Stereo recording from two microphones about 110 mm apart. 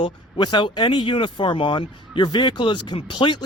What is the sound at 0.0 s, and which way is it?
Speech, 45° left (ahead or behind).